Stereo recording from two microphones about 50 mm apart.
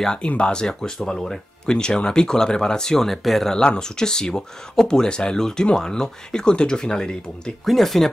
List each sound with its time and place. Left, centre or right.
0.0 s speech: centre
3.5 s speech: centre
7.6 s speech: centre